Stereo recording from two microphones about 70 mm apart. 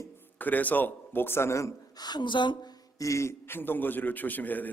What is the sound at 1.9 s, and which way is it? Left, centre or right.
Speech, left.